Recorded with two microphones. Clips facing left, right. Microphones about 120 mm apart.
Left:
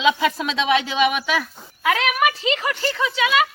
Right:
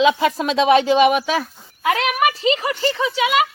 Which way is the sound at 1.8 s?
5° right (ahead or behind).